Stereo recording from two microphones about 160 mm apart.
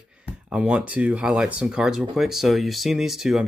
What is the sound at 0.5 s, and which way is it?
Speech, 10° right (ahead or behind).